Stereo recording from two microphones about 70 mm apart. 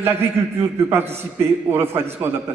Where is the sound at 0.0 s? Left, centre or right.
Right.